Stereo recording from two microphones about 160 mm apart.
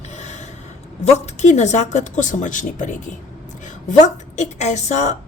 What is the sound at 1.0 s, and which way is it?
Speech, 45° left (ahead or behind).